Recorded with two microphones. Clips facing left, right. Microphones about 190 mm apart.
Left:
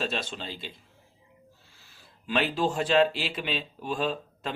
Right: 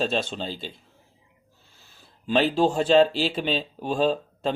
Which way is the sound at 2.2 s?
30° right (ahead or behind).